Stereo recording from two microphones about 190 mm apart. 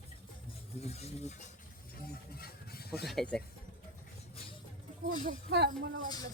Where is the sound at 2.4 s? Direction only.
55° left (ahead or behind).